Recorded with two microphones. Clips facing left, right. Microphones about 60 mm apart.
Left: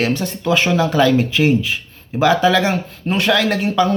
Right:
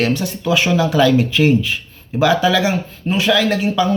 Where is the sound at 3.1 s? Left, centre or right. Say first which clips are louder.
Right 1 dB; left.